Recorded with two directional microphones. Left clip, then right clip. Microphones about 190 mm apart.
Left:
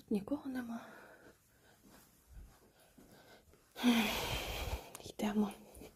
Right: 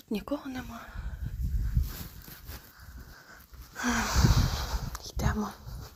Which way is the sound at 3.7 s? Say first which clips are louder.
Right 4 dB; 25° left (ahead or behind).